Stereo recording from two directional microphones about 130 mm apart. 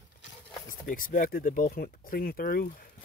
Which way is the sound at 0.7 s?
90° left.